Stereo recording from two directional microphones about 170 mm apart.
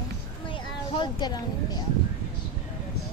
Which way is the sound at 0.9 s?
25° left (ahead or behind).